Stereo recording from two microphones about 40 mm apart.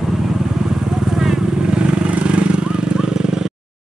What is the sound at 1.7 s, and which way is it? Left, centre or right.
Vehicle, right.